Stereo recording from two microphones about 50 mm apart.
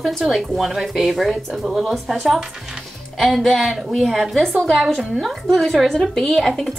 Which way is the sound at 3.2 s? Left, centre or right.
Centre.